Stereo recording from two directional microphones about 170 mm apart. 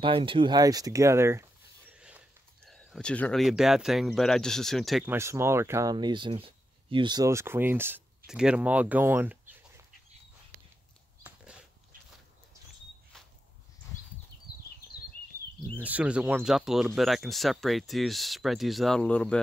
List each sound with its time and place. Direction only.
0.0 s speech: 30° right (ahead or behind); by 5.0 s centre (ahead or behind)
5.0 s speech: 15° right (ahead or behind)
11.3 s dog: 10° right (ahead or behind)
15.8 s speech: 10° right (ahead or behind)